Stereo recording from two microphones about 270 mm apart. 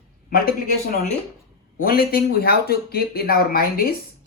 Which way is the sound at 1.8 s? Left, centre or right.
Left.